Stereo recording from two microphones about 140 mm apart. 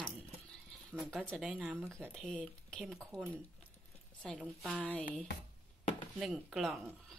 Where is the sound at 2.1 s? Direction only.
5° left (ahead or behind).